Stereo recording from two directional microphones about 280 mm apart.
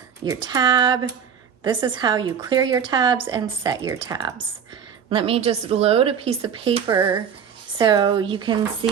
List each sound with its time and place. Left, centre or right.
0.3 s speech: centre